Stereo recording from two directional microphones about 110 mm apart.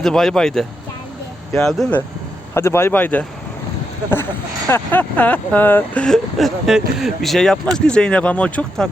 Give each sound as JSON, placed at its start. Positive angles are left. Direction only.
{"t": 0.0, "sound": "speech", "side_deg": 5}
{"t": 2.6, "sound": "speech", "side_deg": 20}
{"t": 4.7, "sound": "speech", "side_deg": 15}